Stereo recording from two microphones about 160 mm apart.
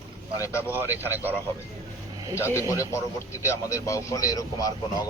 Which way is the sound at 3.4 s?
20° left (ahead or behind).